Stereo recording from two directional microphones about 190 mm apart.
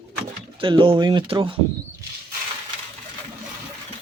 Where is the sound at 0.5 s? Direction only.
25° right (ahead or behind).